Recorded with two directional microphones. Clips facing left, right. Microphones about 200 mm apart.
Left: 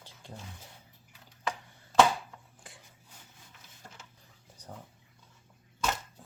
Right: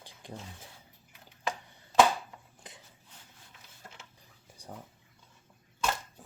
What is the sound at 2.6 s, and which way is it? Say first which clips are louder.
Dishes: right 2 dB; 20° right (ahead or behind).